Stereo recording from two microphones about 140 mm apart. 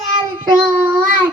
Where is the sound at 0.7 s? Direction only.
15° right (ahead or behind).